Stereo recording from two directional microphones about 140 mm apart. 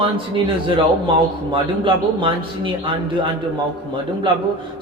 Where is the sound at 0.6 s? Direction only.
35° right (ahead or behind).